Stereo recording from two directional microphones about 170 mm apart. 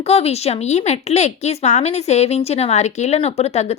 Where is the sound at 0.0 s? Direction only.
35° left (ahead or behind).